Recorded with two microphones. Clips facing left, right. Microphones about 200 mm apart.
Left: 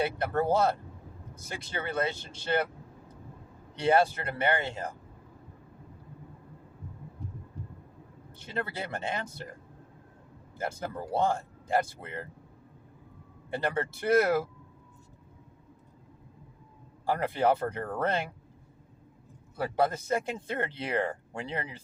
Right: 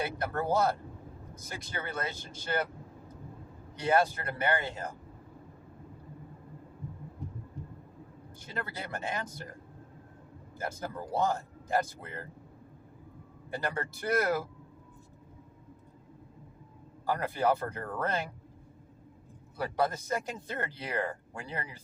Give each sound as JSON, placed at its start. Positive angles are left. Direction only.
{"t": 0.0, "sound": "speech", "side_deg": 25}
{"t": 3.8, "sound": "speech", "side_deg": 30}
{"t": 8.4, "sound": "speech", "side_deg": 25}
{"t": 10.6, "sound": "speech", "side_deg": 30}
{"t": 13.5, "sound": "speech", "side_deg": 25}
{"t": 17.1, "sound": "speech", "side_deg": 25}
{"t": 19.5, "sound": "speech", "side_deg": 25}